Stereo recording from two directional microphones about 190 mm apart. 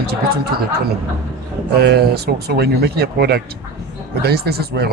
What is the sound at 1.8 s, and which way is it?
Speech, 60° right (ahead or behind).